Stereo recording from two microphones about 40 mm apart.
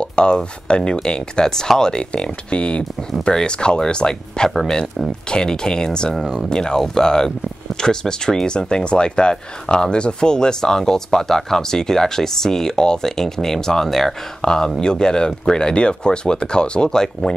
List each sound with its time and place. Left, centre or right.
0.0 s speech: left
6.1 s speech: centre
6.5 s speech: centre
14.4 s speech: centre